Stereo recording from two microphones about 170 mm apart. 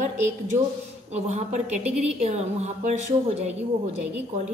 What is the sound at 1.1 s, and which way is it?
Speech, 40° right (ahead or behind).